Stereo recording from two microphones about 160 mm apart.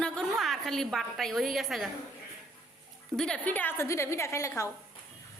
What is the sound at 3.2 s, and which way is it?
A woman's voice, 5° left (ahead or behind).